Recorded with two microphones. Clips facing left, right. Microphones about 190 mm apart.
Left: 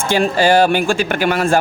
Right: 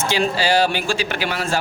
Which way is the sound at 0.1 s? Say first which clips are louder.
Left 6 dB; 50° left (ahead or behind).